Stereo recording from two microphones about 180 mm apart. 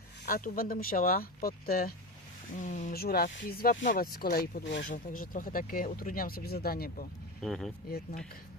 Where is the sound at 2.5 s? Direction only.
45° left (ahead or behind); by 4.9 s 65° left (ahead or behind).